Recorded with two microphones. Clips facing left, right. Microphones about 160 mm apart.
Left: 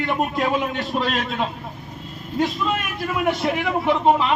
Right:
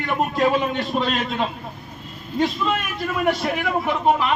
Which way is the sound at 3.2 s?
20° left (ahead or behind).